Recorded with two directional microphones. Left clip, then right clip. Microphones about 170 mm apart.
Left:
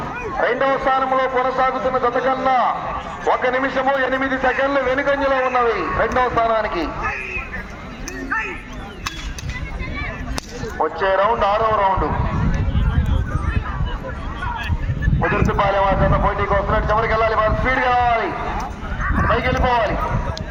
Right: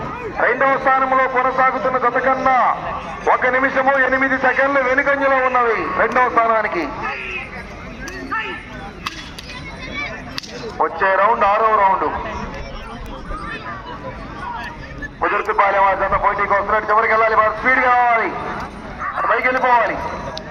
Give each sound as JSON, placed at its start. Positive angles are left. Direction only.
{"t": 0.3, "sound": "a man's voice", "side_deg": -30}
{"t": 10.8, "sound": "a man's voice", "side_deg": -30}
{"t": 15.5, "sound": "a man's voice", "side_deg": -30}
{"t": 19.5, "sound": "a man's voice", "side_deg": -30}